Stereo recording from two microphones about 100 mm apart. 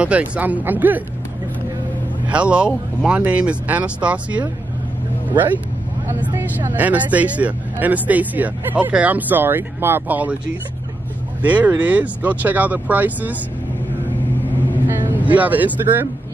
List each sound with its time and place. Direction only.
0.0 s speech: 15° right (ahead or behind)
2.2 s speech: 10° right (ahead or behind)
6.3 s speech: 20° right (ahead or behind)
11.4 s speech: 15° right (ahead or behind)
15.1 s speech: 15° right (ahead or behind)